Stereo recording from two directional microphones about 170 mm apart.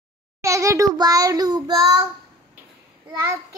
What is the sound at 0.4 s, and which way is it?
A child's voice, 20° right (ahead or behind).